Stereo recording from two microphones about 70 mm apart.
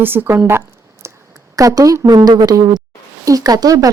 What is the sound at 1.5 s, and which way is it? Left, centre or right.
Speech, right.